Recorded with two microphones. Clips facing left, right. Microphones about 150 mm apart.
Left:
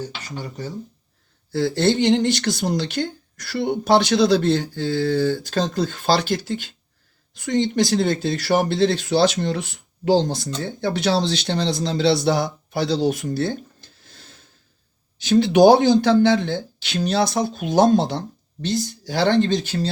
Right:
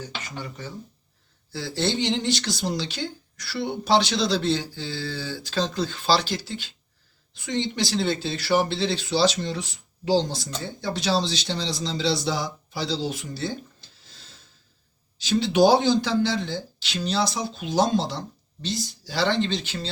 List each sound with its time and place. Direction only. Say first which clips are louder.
0.3 s speech: left 5 dB; 40° left (ahead or behind)
1.5 s speech: left 8 dB; 55° left (ahead or behind)